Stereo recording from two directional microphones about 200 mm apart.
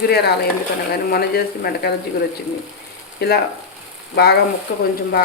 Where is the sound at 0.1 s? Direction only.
55° left (ahead or behind).